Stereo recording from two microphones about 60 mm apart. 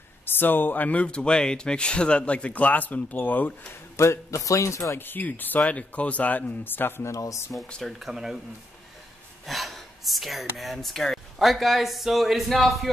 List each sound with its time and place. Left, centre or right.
0.2 s speech: left
3.9 s speech: left
4.9 s speech: left
7.1 s speech: left
8.0 s speech: centre
9.5 s gasp: centre
10.6 s speech: centre